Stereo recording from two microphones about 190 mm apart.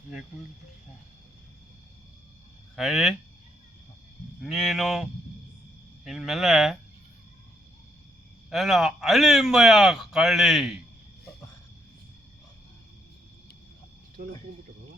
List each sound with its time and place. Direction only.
2.7 s a man's voice: centre (ahead or behind)
4.4 s a man's voice: centre (ahead or behind)
6.1 s a man's voice: centre (ahead or behind)
8.4 s a man's voice: centre (ahead or behind)
14.2 s speech: 50° right (ahead or behind)